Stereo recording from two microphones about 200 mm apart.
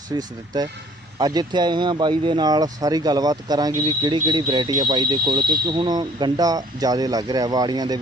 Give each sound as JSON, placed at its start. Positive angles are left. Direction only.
{"t": 0.1, "sound": "speech", "side_deg": -20}